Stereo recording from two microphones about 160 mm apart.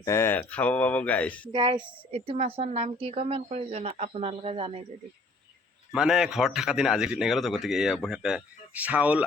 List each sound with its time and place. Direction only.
0.0 s speech: 15° left (ahead or behind)
1.5 s a woman's voice: 30° right (ahead or behind)
5.9 s a man's voice: 5° right (ahead or behind)